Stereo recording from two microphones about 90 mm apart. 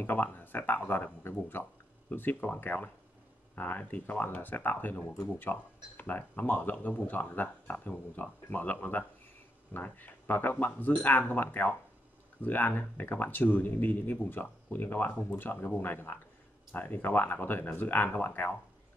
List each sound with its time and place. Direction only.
0.0 s speech: 25° left (ahead or behind)